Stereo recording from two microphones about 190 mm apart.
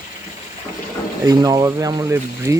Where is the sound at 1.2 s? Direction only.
20° right (ahead or behind).